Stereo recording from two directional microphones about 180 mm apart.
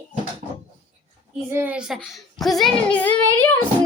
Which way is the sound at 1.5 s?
10° right (ahead or behind).